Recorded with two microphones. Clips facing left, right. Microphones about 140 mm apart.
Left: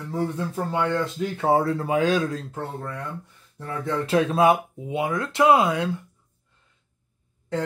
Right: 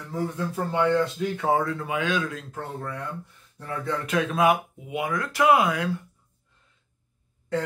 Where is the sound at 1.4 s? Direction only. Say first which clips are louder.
Left 4 dB; 35° left (ahead or behind).